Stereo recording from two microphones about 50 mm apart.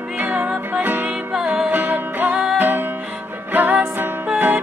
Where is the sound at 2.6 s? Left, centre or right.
Right.